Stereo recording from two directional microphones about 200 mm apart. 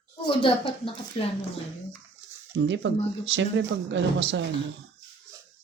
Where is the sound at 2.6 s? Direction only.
65° right (ahead or behind).